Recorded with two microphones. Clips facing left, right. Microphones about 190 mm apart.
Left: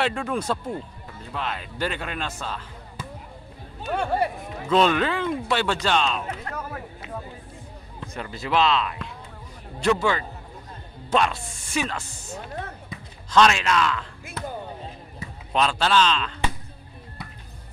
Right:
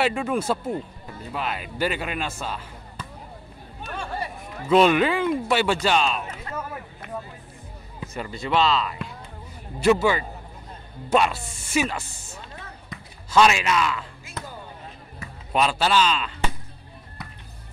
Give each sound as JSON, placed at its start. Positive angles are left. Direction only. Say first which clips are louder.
{"t": 0.0, "sound": "speech", "louder": "right 2 dB", "side_deg": -5}
{"t": 3.9, "sound": "speech", "louder": "left 8 dB", "side_deg": 60}
{"t": 4.6, "sound": "speech", "louder": "right 3 dB", "side_deg": -10}
{"t": 6.5, "sound": "a sound", "louder": "right 1 dB", "side_deg": 75}
{"t": 8.0, "sound": "speech", "louder": "right 2 dB", "side_deg": -5}
{"t": 12.4, "sound": "chop", "louder": "left 8 dB", "side_deg": 60}
{"t": 13.3, "sound": "speech", "louder": "even", "side_deg": -5}
{"t": 14.2, "sound": "basketball bounce", "louder": "left 4 dB", "side_deg": 55}
{"t": 15.5, "sound": "speech", "louder": "even", "side_deg": -10}